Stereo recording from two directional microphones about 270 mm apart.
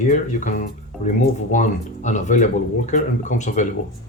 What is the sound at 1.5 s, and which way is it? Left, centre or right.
Speech, left.